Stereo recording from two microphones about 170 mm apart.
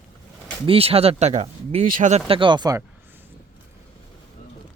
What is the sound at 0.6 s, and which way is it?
Speech, 35° right (ahead or behind).